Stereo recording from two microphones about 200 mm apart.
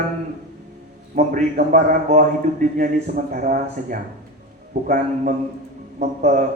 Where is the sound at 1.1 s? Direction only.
45° right (ahead or behind).